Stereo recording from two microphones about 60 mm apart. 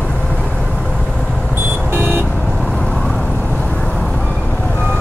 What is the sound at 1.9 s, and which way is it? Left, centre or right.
Vehicle, right.